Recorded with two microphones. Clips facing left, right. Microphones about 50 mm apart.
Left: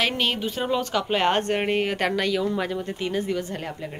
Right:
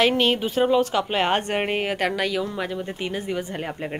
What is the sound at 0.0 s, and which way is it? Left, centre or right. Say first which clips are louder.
Speech: right 5 dB; centre.